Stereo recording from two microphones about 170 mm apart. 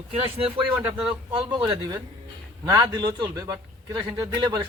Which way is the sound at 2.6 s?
25° right (ahead or behind).